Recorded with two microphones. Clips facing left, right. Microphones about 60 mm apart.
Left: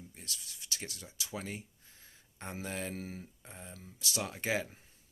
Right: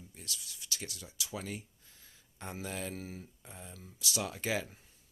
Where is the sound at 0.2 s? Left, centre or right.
Left.